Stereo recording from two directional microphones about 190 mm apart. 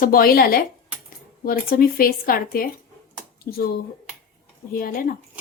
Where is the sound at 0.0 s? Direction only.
50° left (ahead or behind).